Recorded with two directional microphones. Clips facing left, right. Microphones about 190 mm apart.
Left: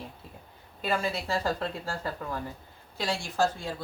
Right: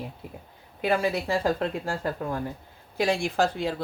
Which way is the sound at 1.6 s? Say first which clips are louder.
Right 5 dB; 50° right (ahead or behind).